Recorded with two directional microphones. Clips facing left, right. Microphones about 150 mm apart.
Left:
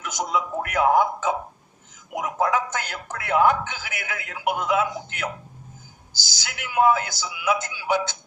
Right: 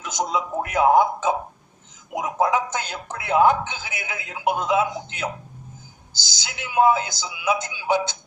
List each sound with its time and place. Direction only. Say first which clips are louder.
0.0 s speech: right 1 dB; 20° right (ahead or behind)